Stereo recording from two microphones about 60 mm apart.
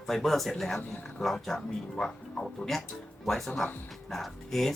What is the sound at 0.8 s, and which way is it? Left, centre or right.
Speech, left.